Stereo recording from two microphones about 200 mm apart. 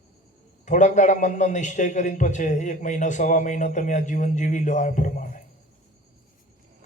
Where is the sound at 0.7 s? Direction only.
40° left (ahead or behind).